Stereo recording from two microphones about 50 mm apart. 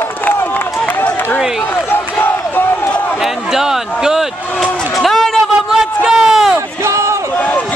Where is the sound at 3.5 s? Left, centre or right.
Centre.